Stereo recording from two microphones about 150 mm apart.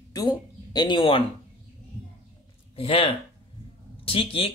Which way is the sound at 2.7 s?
40° left (ahead or behind).